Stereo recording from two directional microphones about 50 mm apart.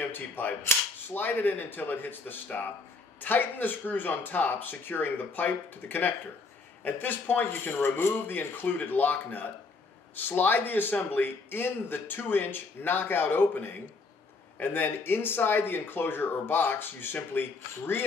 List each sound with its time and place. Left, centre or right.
0.1 s a man's voice: left